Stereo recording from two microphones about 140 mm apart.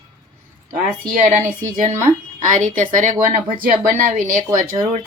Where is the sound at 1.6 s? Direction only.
65° right (ahead or behind).